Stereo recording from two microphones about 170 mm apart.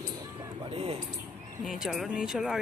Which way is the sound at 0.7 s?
35° right (ahead or behind).